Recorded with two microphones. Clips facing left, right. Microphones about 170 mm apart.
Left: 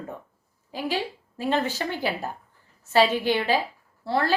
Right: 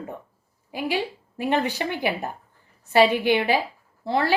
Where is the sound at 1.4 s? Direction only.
15° right (ahead or behind).